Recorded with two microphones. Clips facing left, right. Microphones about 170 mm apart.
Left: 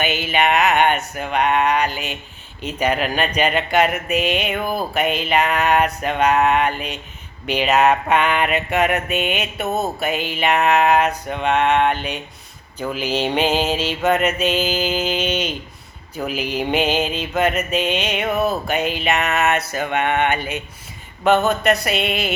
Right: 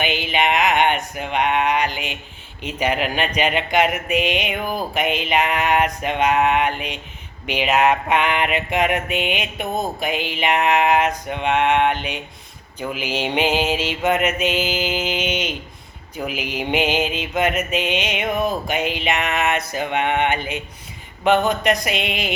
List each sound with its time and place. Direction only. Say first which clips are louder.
0.0 s mantra: left 1 dB; 15° right (ahead or behind)
9.6 s a sound: left 2 dB; 5° left (ahead or behind)
10.0 s mantra: left 1 dB; 15° right (ahead or behind)